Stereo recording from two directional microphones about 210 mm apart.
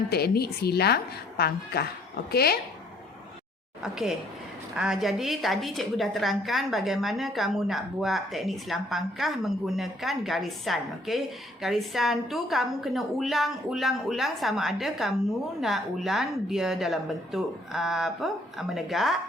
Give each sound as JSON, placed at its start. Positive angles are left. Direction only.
{"t": 0.1, "sound": "a woman's voice", "side_deg": 50}
{"t": 3.8, "sound": "a woman's voice", "side_deg": 0}